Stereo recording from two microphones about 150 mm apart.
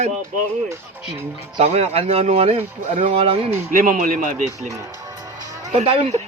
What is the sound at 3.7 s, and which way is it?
Speech, 65° right (ahead or behind).